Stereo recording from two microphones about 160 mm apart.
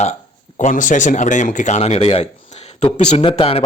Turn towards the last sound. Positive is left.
turn(degrees=35)  # may be behind; listen again after turning